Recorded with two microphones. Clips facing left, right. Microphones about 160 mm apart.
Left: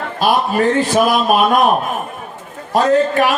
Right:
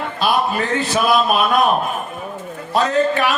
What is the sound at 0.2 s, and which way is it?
Speech, 45° left (ahead or behind).